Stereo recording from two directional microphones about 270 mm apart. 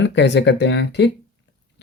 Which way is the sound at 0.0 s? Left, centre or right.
Left.